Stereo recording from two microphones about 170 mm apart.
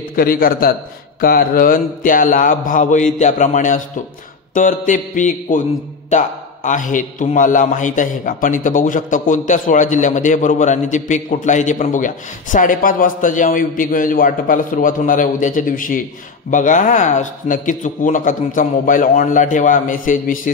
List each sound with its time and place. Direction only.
0.1 s a man's voice: 60° left (ahead or behind)